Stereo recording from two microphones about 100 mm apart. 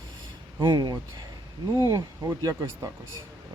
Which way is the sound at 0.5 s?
45° right (ahead or behind).